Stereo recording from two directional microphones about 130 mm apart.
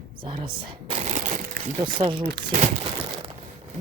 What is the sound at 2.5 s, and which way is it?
Speech, 85° right.